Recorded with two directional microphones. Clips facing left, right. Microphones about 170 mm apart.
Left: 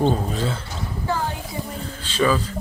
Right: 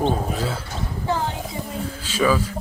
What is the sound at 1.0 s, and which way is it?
Music, 20° right (ahead or behind).